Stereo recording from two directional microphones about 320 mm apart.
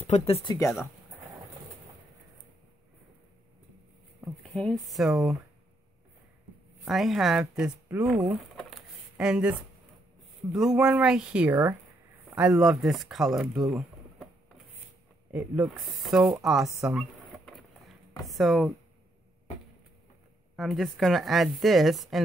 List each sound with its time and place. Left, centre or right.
0.0 s speech: centre
4.2 s speech: centre
6.8 s a woman's voice: centre
13.7 s a sound: centre
15.3 s a woman's voice: centre
20.5 s a woman's voice: centre